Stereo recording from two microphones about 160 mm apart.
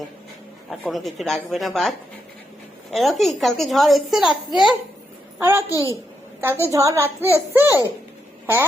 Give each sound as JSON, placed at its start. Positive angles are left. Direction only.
{"t": 0.7, "sound": "a woman's voice", "side_deg": 0}
{"t": 5.4, "sound": "a child's voice", "side_deg": -15}